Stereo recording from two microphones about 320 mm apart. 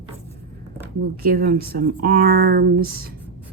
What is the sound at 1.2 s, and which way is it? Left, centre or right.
A woman's voice, right.